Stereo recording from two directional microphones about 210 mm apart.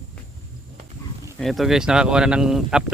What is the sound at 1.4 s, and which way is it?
Speech, centre (ahead or behind).